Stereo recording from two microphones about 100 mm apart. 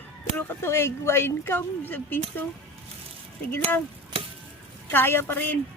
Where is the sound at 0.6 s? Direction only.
25° left (ahead or behind).